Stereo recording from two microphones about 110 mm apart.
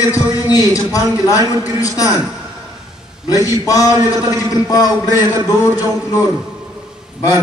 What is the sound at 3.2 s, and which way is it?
A man's voice, 30° left (ahead or behind).